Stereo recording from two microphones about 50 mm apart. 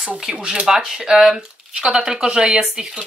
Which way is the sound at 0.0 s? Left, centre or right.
Centre.